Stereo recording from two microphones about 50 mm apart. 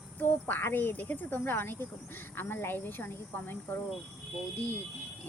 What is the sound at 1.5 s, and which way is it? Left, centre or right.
Speech, left.